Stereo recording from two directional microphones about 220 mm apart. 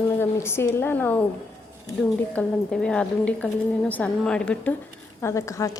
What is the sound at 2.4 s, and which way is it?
A woman's voice, 5° left (ahead or behind).